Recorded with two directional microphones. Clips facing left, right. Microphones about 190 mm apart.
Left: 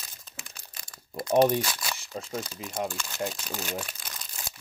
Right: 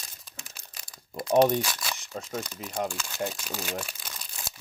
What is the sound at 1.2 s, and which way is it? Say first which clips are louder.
Speech: even; 5° left (ahead or behind).